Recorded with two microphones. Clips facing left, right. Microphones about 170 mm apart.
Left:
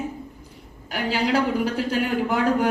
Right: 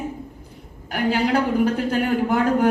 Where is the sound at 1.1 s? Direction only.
50° right (ahead or behind).